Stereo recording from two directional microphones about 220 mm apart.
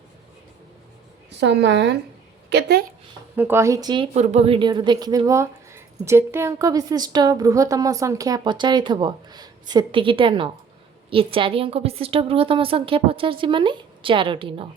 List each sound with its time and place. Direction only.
1.3 s a woman's voice: 50° right (ahead or behind)
3.3 s a woman's voice: 10° right (ahead or behind)